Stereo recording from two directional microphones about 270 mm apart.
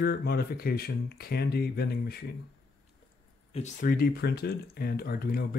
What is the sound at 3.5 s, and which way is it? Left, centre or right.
Speech, left.